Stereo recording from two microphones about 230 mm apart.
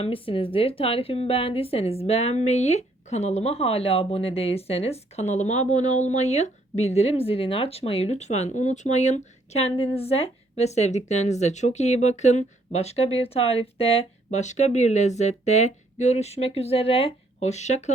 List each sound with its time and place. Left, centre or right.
0.0 s speech: left